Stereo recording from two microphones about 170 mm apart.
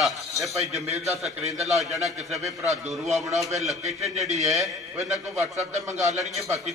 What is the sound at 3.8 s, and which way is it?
A man's voice, 40° right (ahead or behind).